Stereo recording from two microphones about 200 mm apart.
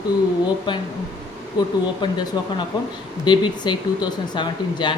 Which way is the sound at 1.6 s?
20° left (ahead or behind).